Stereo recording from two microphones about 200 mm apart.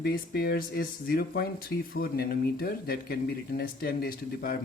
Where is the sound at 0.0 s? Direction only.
50° left (ahead or behind).